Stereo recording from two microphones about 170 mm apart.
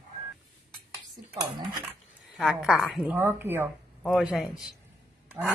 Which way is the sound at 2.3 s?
Centre (ahead or behind).